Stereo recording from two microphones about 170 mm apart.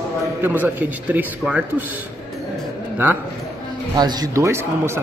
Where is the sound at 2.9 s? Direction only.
10° right (ahead or behind).